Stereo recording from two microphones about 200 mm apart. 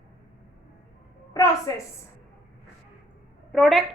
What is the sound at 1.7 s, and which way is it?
Speech, 15° left (ahead or behind).